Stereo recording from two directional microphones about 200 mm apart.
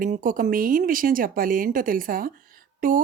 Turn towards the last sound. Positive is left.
turn(degrees=-45)  # may be behind; listen again after turning